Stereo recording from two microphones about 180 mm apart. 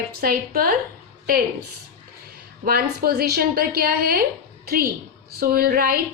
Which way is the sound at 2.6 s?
55° right (ahead or behind).